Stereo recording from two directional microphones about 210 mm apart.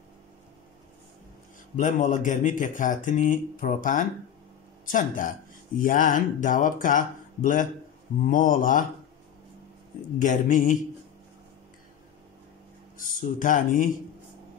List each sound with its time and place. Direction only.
1.8 s speech: 35° left (ahead or behind)
10.1 s speech: 40° left (ahead or behind)
12.9 s speech: 40° left (ahead or behind)